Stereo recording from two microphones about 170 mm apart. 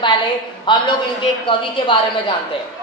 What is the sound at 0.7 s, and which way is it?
A woman's voice, 30° left (ahead or behind).